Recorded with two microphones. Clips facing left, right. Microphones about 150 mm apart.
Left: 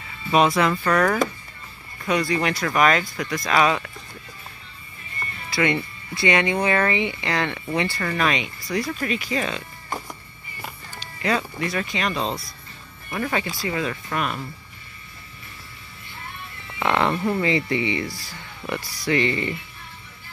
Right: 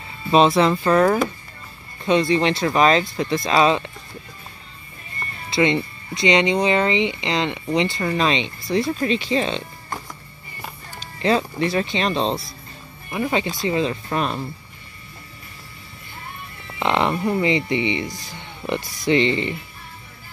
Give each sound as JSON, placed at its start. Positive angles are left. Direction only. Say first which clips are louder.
{"t": 0.3, "sound": "speech", "louder": "right 3 dB", "side_deg": -25}
{"t": 5.5, "sound": "speech", "louder": "right 4 dB", "side_deg": -20}
{"t": 11.1, "sound": "speech", "louder": "right 5 dB", "side_deg": -30}
{"t": 16.8, "sound": "speech", "louder": "right 1 dB", "side_deg": -20}